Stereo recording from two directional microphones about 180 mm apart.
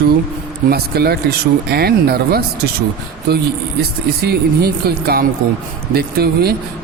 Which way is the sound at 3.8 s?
60° right (ahead or behind).